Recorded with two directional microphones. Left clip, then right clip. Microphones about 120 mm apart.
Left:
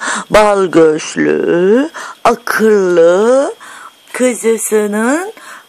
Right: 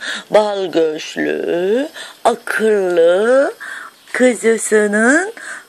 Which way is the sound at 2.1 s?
90° left.